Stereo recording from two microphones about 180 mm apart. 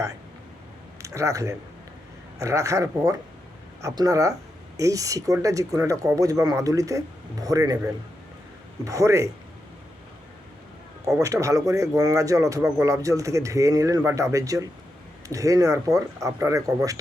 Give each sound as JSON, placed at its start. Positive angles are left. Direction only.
{"t": 1.0, "sound": "speech", "side_deg": -15}
{"t": 11.2, "sound": "speech", "side_deg": -15}